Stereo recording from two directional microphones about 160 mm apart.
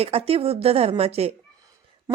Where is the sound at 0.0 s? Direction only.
40° right (ahead or behind).